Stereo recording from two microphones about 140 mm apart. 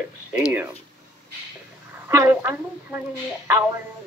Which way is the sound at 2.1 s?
15° right (ahead or behind).